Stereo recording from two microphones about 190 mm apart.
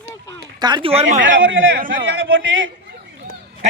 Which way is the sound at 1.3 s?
85° right.